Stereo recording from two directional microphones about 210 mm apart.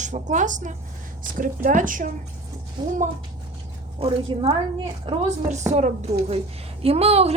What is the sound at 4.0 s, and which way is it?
Speech, 25° right (ahead or behind).